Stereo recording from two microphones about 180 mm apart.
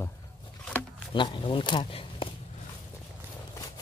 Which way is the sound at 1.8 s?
30° left (ahead or behind).